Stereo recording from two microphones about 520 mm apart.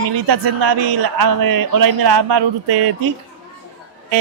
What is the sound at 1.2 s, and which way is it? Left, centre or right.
Speech, right.